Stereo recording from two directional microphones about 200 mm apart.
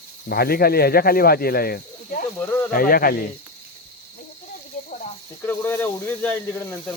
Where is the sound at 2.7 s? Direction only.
45° left (ahead or behind).